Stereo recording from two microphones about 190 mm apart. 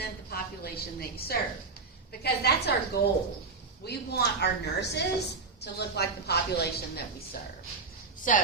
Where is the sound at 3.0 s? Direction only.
55° left (ahead or behind).